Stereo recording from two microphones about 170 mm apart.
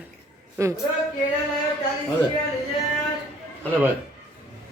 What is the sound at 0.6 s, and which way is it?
Speech, 15° right (ahead or behind).